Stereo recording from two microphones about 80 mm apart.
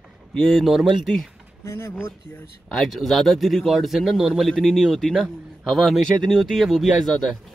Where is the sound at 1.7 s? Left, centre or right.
Left.